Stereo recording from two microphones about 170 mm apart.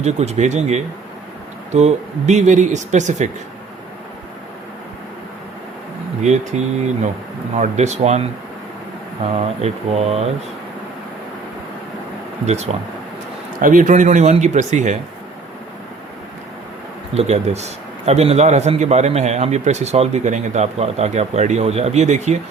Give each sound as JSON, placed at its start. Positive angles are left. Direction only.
{"t": 0.0, "sound": "speech", "side_deg": -40}
{"t": 6.2, "sound": "a man's voice", "side_deg": -45}
{"t": 9.3, "sound": "a man's voice", "side_deg": -40}
{"t": 12.7, "sound": "speech", "side_deg": -40}
{"t": 17.2, "sound": "a man's voice", "side_deg": -40}